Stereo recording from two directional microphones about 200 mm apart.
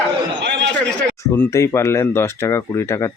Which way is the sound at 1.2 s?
15° left (ahead or behind).